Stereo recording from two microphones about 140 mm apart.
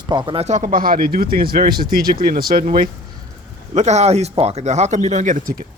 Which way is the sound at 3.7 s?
55° right (ahead or behind).